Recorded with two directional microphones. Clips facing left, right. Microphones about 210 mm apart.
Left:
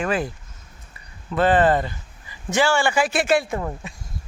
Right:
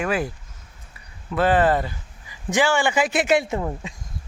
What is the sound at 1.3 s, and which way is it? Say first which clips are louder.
Speech: left 1 dB; 10° right (ahead or behind).